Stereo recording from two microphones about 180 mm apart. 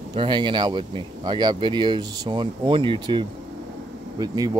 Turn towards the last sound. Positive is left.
turn(degrees=-20)  # may be behind; listen again after turning